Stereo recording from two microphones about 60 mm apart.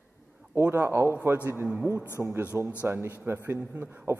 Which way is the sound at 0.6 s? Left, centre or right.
Right.